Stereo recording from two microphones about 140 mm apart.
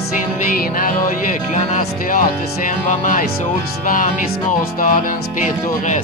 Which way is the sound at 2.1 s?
70° left (ahead or behind).